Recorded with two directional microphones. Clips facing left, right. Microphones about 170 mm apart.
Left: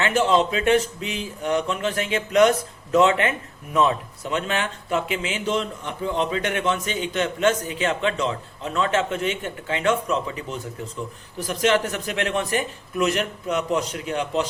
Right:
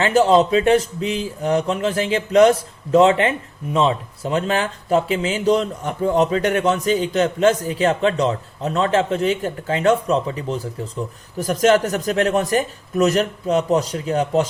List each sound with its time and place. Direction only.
0.0 s speech: 35° right (ahead or behind)